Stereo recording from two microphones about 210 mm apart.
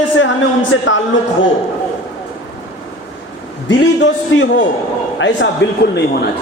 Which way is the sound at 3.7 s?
60° left (ahead or behind).